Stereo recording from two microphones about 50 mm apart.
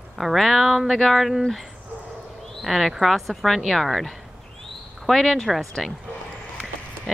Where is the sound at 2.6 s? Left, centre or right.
Centre.